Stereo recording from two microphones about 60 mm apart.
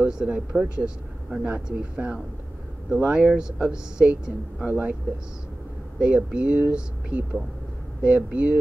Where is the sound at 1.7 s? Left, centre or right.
Right.